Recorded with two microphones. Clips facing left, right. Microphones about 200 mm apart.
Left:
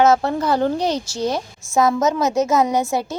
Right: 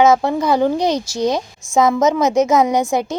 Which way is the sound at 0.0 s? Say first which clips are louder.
Right 2 dB; 15° right (ahead or behind).